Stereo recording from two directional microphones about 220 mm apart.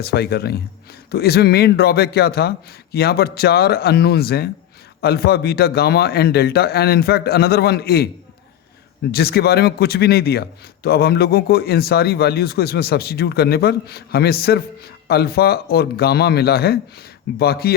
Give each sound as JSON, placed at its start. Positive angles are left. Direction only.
{"t": 0.0, "sound": "a man's voice", "side_deg": 45}
{"t": 9.1, "sound": "a man's voice", "side_deg": 45}